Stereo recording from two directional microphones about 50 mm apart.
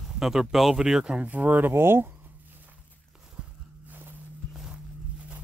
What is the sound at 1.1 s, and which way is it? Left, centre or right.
Speech, right.